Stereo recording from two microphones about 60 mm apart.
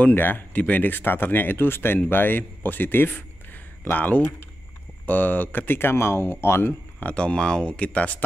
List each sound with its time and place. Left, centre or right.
0.0 s speech: left
7.2 s speech: centre